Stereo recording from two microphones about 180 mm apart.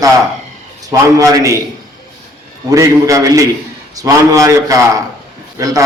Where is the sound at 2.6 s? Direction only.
20° right (ahead or behind).